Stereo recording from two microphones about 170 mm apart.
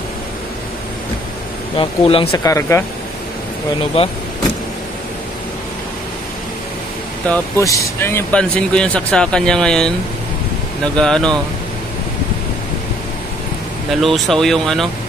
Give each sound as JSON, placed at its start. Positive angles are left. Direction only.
{"t": 1.8, "sound": "speech", "side_deg": 30}
{"t": 2.3, "sound": "speech", "side_deg": 20}
{"t": 4.0, "sound": "speech", "side_deg": 35}
{"t": 7.2, "sound": "speech", "side_deg": 15}
{"t": 11.0, "sound": "speech", "side_deg": 5}
{"t": 14.0, "sound": "speech", "side_deg": 0}